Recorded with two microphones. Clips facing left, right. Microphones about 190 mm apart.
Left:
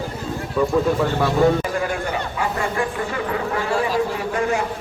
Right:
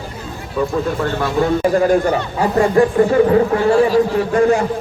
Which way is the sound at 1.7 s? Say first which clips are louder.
Right 10 dB; 40° right (ahead or behind).